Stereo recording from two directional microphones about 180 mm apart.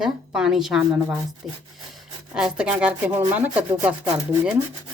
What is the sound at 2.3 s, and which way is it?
A woman's voice, 5° right (ahead or behind).